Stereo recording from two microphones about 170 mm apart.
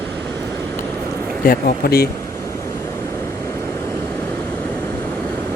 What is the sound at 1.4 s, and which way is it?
Speech, 60° left (ahead or behind).